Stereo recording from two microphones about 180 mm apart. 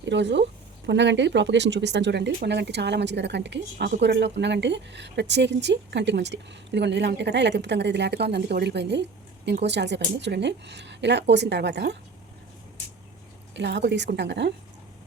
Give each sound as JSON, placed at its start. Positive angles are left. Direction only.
{"t": 0.0, "sound": "speech", "side_deg": -80}
{"t": 13.6, "sound": "speech", "side_deg": -75}